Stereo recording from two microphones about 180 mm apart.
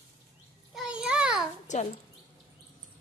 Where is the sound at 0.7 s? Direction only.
5° right (ahead or behind).